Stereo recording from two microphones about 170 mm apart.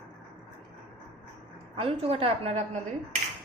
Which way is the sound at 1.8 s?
35° right (ahead or behind).